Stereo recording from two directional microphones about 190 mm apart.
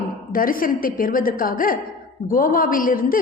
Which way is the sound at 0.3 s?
50° left (ahead or behind).